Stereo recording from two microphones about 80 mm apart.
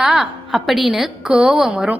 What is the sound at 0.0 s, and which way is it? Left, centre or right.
A woman's voice, centre.